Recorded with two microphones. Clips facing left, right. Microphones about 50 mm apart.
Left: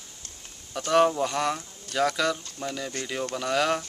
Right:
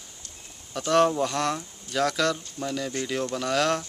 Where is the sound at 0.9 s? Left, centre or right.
Centre.